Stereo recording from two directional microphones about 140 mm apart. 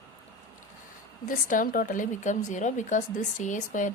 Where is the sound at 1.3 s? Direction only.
70° left (ahead or behind).